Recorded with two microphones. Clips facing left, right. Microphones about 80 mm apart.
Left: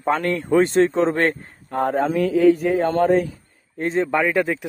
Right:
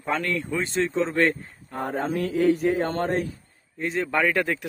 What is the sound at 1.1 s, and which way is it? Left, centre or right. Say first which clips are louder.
Speech: left 2 dB; left.